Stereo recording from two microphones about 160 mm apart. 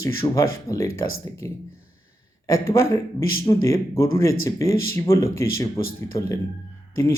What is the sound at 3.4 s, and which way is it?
Speech, 20° left (ahead or behind).